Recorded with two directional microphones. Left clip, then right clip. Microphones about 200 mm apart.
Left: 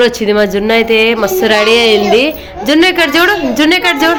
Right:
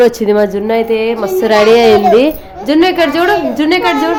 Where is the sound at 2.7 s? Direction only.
Centre (ahead or behind).